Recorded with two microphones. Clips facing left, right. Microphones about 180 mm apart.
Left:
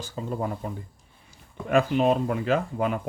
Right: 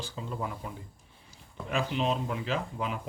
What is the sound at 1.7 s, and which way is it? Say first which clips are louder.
Speech: left 9 dB; 55° left (ahead or behind).